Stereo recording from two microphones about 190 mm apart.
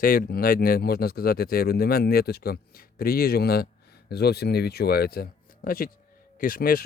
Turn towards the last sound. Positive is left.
turn(degrees=50)  # may be behind; listen again after turning